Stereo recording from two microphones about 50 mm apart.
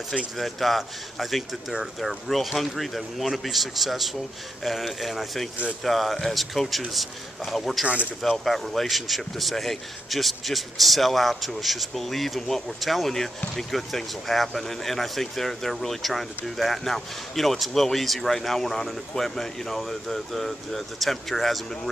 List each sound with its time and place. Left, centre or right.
0.4 s speech: centre
7.8 s speech: right
8.2 s speech: centre